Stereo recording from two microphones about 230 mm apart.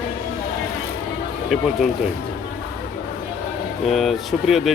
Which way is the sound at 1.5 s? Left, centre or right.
Centre.